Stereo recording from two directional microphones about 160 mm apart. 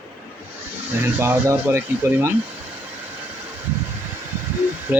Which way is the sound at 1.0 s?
15° right (ahead or behind).